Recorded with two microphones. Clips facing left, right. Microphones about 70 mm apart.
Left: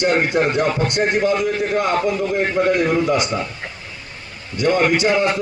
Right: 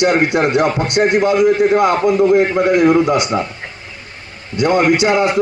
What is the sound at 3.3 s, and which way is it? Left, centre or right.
Speech, right.